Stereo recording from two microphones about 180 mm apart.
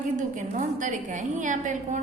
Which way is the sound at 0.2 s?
45° right (ahead or behind).